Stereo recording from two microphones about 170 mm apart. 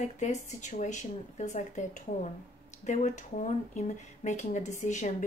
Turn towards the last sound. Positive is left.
turn(degrees=45)  # may be behind; listen again after turning